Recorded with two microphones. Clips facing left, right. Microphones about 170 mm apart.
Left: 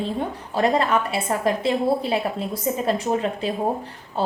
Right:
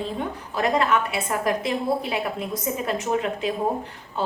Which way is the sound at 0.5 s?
30° left (ahead or behind).